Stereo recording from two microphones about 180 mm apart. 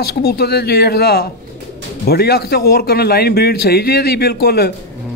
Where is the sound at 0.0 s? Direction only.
60° left (ahead or behind).